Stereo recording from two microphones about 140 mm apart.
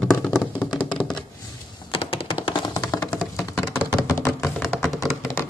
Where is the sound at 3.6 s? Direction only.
5° right (ahead or behind).